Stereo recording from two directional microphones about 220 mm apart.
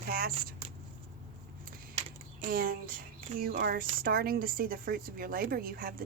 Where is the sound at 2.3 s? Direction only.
40° right (ahead or behind).